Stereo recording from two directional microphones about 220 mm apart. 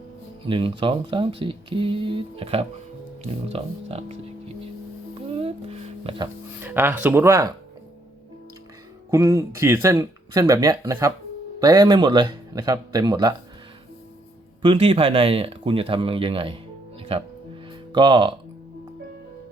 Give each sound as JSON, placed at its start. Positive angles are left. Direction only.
{"t": 0.4, "sound": "speech", "side_deg": -20}
{"t": 5.3, "sound": "a sound", "side_deg": -25}
{"t": 6.6, "sound": "speech", "side_deg": -10}
{"t": 9.0, "sound": "speech", "side_deg": -15}
{"t": 14.6, "sound": "speech", "side_deg": -25}
{"t": 17.0, "sound": "music", "side_deg": -25}